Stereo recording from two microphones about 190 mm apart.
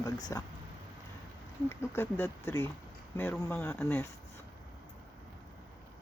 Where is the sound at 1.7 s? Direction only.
15° left (ahead or behind).